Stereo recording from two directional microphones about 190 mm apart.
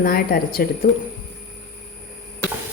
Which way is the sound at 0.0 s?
50° left (ahead or behind).